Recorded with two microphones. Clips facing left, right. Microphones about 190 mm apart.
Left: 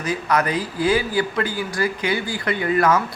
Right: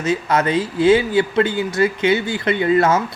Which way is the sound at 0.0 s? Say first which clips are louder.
Right 3 dB; 25° right (ahead or behind).